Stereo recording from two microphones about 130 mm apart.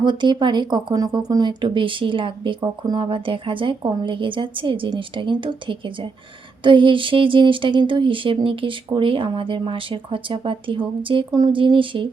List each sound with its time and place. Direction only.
0.0 s speech: 35° right (ahead or behind)